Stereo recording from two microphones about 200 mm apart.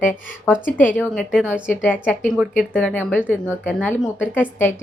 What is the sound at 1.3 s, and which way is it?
A woman's voice, 5° right (ahead or behind).